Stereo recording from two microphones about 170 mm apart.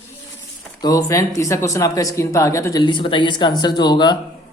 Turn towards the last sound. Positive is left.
turn(degrees=25)  # may be behind; listen again after turning